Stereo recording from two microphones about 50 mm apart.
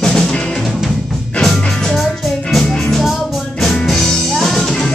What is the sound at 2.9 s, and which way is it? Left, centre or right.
Music, centre.